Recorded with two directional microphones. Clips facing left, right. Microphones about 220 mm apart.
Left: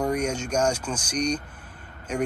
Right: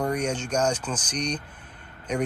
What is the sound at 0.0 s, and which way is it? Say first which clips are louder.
Speech: left 1 dB; 10° left (ahead or behind).